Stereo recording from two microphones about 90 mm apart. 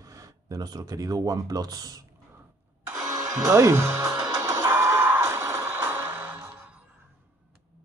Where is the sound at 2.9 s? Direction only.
35° right (ahead or behind).